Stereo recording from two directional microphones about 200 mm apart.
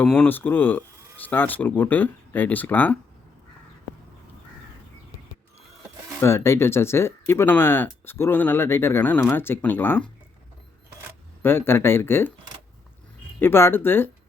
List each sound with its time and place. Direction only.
0.0 s speech: 5° left (ahead or behind)
6.2 s speech: 15° left (ahead or behind)
11.4 s speech: 10° left (ahead or behind)
13.4 s speech: 10° left (ahead or behind)